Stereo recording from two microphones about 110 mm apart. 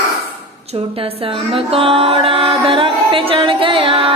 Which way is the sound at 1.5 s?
55° right (ahead or behind).